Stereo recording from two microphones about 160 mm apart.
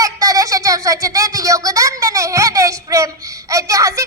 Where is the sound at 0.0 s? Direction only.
20° right (ahead or behind).